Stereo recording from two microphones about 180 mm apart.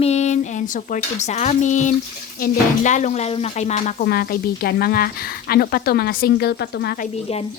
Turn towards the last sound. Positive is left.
turn(degrees=35)  # may be behind; listen again after turning